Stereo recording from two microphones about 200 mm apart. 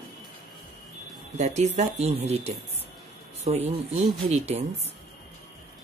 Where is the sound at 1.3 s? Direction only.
35° right (ahead or behind).